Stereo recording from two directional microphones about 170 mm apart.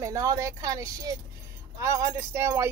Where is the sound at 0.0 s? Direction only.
20° right (ahead or behind).